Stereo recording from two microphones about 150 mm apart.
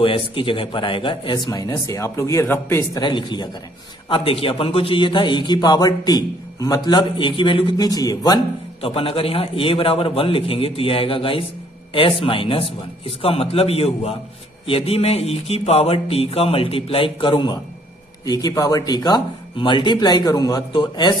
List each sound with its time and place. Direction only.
0.0 s speech: 35° left (ahead or behind); by 3.0 s 15° left (ahead or behind)
3.0 s a man's voice: 30° left (ahead or behind)
8.8 s a man's voice: 40° left (ahead or behind)